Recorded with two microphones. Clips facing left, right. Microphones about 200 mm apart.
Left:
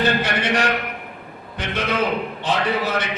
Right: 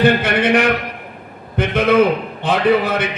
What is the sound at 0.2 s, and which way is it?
A man's voice, 55° right (ahead or behind).